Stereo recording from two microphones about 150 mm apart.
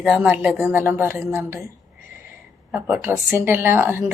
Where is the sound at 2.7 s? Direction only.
10° right (ahead or behind).